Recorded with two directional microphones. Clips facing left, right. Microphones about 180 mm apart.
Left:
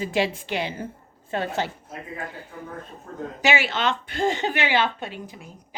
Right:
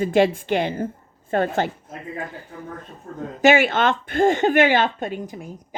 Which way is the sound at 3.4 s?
50° right (ahead or behind).